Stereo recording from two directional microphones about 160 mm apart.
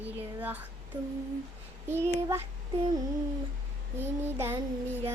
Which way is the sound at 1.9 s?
15° right (ahead or behind).